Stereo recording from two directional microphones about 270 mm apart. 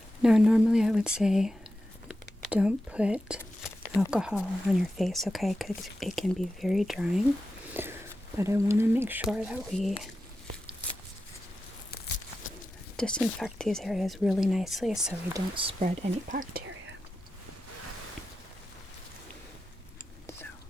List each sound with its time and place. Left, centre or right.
0.2 s speech: centre
7.7 s walk: centre
8.4 s speech: centre
13.0 s speech: centre
15.3 s speech: centre